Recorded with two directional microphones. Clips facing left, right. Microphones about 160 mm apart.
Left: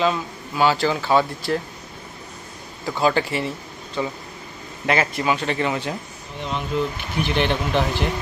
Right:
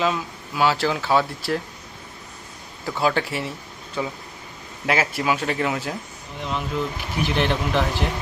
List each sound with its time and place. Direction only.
0.0 s speech: centre (ahead or behind)
2.8 s speech: centre (ahead or behind)